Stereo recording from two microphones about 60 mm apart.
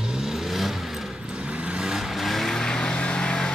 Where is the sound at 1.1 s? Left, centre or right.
Centre.